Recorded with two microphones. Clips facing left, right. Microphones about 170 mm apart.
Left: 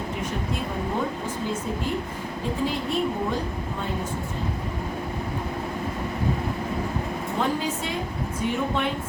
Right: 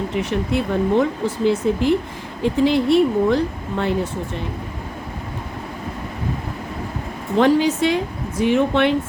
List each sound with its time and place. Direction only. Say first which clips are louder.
0.2 s speech: right 11 dB; 80° right
7.3 s speech: right 12 dB; 80° right